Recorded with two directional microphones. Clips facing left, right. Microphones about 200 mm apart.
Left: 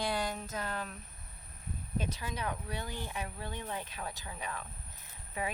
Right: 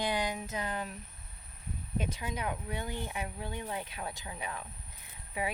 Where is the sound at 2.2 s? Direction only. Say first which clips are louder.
Right 2 dB; 20° right (ahead or behind).